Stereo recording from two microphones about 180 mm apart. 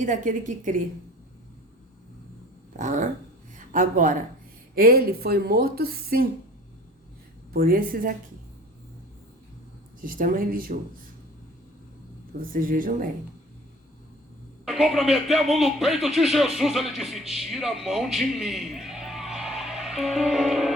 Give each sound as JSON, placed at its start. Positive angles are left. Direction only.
{"t": 0.0, "sound": "a woman's voice", "side_deg": -45}
{"t": 2.7, "sound": "a woman's voice", "side_deg": -45}
{"t": 7.5, "sound": "a woman's voice", "side_deg": -55}
{"t": 10.0, "sound": "a woman's voice", "side_deg": -50}
{"t": 12.4, "sound": "a woman's voice", "side_deg": -50}
{"t": 14.6, "sound": "speech", "side_deg": 0}